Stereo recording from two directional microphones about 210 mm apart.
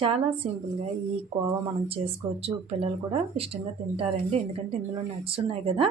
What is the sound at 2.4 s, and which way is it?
Speech, 30° right (ahead or behind).